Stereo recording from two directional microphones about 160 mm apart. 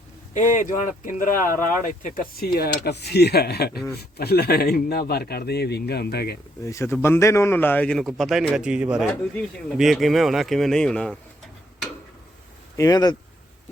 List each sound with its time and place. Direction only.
0.3 s speech: 50° left (ahead or behind); by 6.3 s 85° left
6.7 s a man's voice: 20° left (ahead or behind)
12.7 s speech: 20° left (ahead or behind)